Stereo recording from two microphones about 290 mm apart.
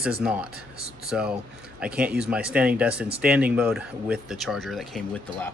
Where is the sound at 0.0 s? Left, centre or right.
Centre.